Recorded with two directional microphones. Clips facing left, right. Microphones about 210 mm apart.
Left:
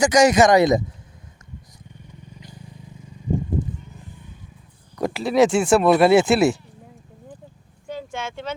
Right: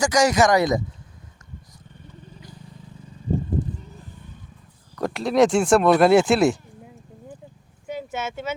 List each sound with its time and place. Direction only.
0.0 s speech: 20° left (ahead or behind)
4.9 s speech: 5° left (ahead or behind)
7.9 s a sound: 5° right (ahead or behind)